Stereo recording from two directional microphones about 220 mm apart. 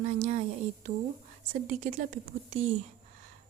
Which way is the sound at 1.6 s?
35° right (ahead or behind).